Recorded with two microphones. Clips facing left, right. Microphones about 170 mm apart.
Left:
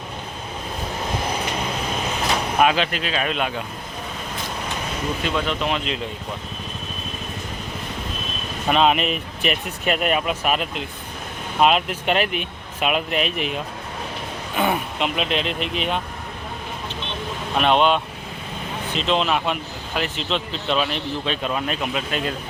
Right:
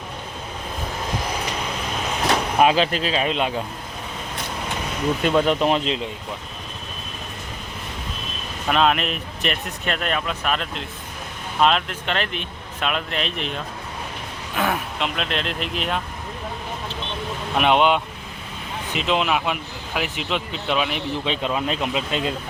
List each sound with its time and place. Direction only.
2.6 s speech: 30° right (ahead or behind)
5.2 s speech: 45° right (ahead or behind)
8.7 s speech: centre (ahead or behind)
17.6 s speech: 15° right (ahead or behind)